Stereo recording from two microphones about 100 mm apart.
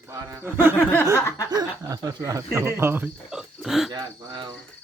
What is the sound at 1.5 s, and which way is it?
Speech, 35° right (ahead or behind).